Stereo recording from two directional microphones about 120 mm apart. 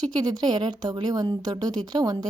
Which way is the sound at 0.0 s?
35° right (ahead or behind).